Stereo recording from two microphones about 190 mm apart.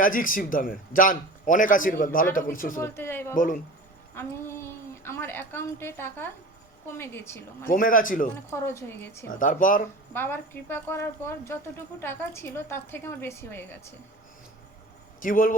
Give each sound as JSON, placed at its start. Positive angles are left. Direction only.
{"t": 0.0, "sound": "a man's voice", "side_deg": 45}
{"t": 2.8, "sound": "a woman's voice", "side_deg": 10}
{"t": 3.3, "sound": "a man's voice", "side_deg": 45}
{"t": 4.1, "sound": "a sound", "side_deg": 10}
{"t": 6.9, "sound": "a woman's voice", "side_deg": 15}
{"t": 7.6, "sound": "a man's voice", "side_deg": 45}
{"t": 8.4, "sound": "a woman's voice", "side_deg": 15}
{"t": 9.3, "sound": "a man's voice", "side_deg": 45}
{"t": 10.2, "sound": "a woman's voice", "side_deg": 10}
{"t": 15.2, "sound": "a man's voice", "side_deg": 45}